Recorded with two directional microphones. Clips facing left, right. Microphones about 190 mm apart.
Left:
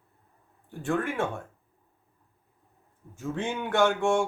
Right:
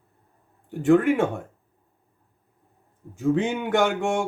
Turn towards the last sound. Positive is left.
turn(degrees=-20)  # may be behind; listen again after turning